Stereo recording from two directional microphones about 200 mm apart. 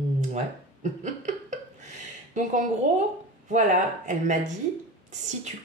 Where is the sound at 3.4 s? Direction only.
40° right (ahead or behind).